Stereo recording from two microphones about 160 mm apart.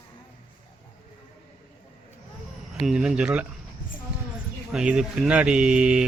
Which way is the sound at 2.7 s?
5° right (ahead or behind).